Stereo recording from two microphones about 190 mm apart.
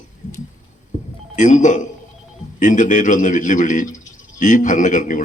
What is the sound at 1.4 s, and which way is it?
A man's voice, 40° left (ahead or behind).